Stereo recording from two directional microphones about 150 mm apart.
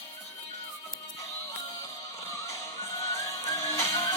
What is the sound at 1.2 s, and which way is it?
Music, 25° left (ahead or behind).